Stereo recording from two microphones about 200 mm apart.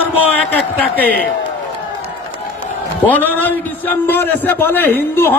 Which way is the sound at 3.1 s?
10° left (ahead or behind).